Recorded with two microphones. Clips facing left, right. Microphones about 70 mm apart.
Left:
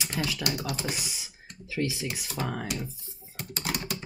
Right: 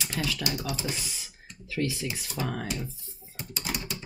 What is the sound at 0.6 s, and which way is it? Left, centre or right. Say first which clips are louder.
Speech: even; left.